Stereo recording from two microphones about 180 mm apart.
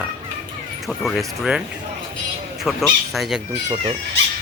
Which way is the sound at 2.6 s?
Centre (ahead or behind).